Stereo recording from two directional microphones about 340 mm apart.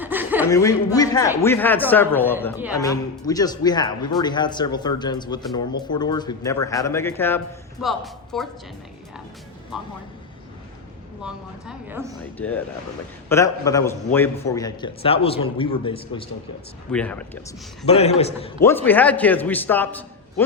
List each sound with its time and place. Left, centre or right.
0.0 s chuckle: centre
0.5 s a man's voice: centre
11.2 s a man's voice: centre
16.9 s speech: centre
17.8 s a man's voice: centre
18.6 s speech: centre